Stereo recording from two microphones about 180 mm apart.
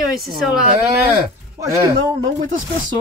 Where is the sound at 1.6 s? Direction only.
15° right (ahead or behind).